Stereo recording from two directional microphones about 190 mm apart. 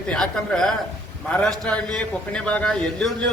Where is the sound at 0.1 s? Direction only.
5° left (ahead or behind).